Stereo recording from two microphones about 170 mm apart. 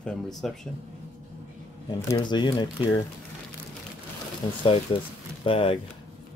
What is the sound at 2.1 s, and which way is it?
Speech, 25° left (ahead or behind).